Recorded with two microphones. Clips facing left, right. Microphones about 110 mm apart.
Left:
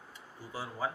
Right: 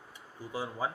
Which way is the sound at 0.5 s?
20° right (ahead or behind).